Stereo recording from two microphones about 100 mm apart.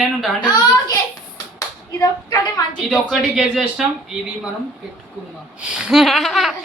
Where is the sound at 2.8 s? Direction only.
Centre (ahead or behind).